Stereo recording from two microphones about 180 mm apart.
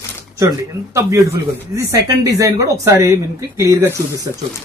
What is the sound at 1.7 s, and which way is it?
Speech, 15° right (ahead or behind).